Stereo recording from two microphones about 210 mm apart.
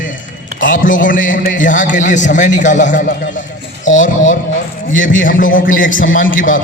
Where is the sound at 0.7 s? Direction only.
40° left (ahead or behind).